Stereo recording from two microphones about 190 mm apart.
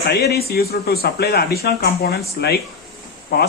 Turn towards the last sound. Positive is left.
turn(degrees=55)  # may be behind; listen again after turning